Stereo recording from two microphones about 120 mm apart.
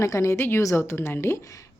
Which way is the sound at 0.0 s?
25° left (ahead or behind).